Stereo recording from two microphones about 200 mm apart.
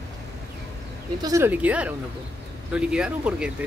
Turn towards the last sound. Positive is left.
turn(degrees=-5)  # may be behind; listen again after turning